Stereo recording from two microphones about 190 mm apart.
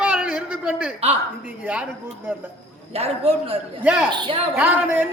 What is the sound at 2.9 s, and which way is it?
Speech, 30° right (ahead or behind).